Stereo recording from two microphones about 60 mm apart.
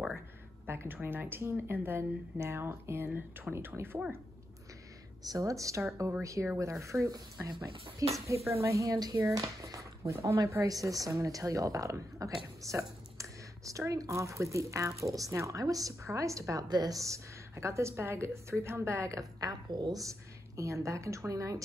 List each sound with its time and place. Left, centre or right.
0.7 s a woman's voice: right
5.2 s speech: right
16.1 s speech: right